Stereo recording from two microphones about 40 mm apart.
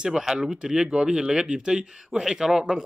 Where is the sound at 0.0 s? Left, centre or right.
Centre.